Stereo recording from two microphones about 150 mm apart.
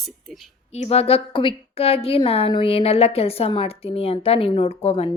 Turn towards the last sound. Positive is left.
turn(degrees=45)  # may be behind; listen again after turning